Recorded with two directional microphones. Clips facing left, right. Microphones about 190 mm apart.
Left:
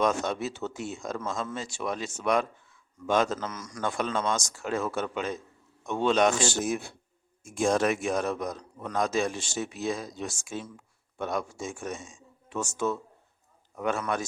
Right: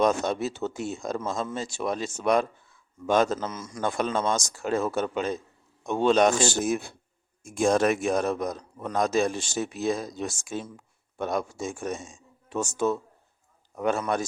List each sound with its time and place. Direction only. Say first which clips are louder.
0.0 s a man's voice: right 3 dB; 35° right (ahead or behind)
3.3 s a man's voice: right 3 dB; 25° right (ahead or behind)
3.9 s a man's voice: right 2 dB; 40° right (ahead or behind)